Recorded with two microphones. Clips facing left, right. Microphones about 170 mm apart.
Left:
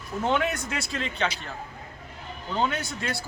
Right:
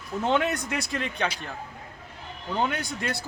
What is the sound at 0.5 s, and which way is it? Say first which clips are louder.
Speech: right 2 dB; 15° right (ahead or behind).